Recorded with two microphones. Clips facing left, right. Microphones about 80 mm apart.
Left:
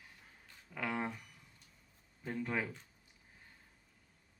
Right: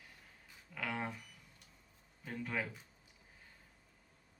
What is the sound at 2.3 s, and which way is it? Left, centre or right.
Speech, centre.